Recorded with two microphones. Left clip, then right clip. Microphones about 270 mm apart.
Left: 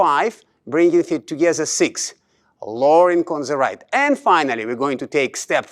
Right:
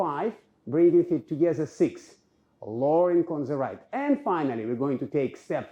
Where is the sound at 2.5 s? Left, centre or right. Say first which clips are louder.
Left 7 dB; left.